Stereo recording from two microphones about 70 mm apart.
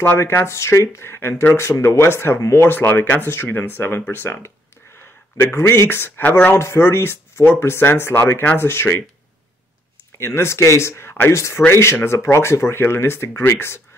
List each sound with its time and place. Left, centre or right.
0.2 s speech: left
6.5 s speech: left
10.1 s speech: left